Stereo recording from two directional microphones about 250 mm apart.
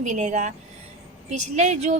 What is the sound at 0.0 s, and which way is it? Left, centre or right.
A woman's voice, right.